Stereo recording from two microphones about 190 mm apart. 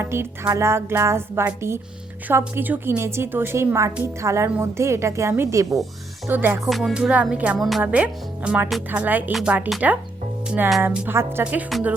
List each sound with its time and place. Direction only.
0.0 s speech: 10° right (ahead or behind)